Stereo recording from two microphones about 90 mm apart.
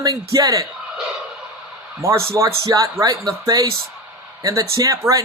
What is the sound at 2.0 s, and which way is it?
Speech, 30° right (ahead or behind).